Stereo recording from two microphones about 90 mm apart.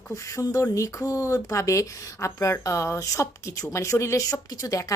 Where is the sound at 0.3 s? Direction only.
40° left (ahead or behind).